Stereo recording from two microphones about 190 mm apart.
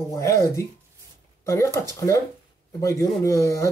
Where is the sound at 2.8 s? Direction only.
15° left (ahead or behind).